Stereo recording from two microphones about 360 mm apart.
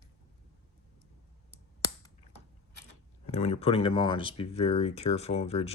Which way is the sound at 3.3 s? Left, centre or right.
Centre.